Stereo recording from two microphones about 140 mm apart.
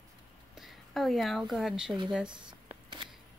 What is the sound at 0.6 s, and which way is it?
Speech, centre (ahead or behind).